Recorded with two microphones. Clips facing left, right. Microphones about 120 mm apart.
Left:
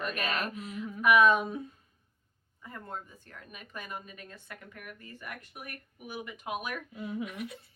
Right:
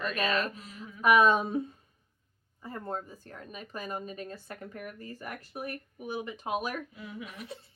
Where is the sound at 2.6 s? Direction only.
35° right (ahead or behind).